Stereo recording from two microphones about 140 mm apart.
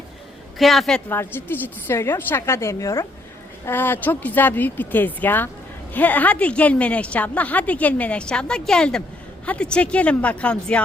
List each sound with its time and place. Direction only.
0.6 s a woman's voice: centre (ahead or behind)
1.1 s a woman's voice: 15° left (ahead or behind)